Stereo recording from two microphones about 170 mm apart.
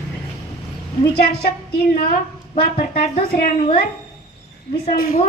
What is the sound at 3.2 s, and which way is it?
Speech, 65° left (ahead or behind).